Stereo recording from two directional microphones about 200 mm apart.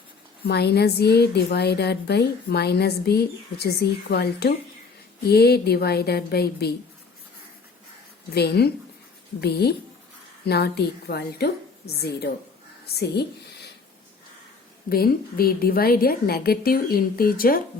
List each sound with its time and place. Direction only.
0.4 s a woman's voice: 55° left (ahead or behind)
8.3 s a woman's voice: 55° left (ahead or behind)
14.8 s a woman's voice: 50° left (ahead or behind)